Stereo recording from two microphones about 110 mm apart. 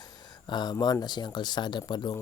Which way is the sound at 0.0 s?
40° left (ahead or behind).